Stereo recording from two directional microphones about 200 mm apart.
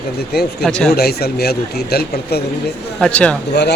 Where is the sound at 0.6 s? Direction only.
Centre (ahead or behind).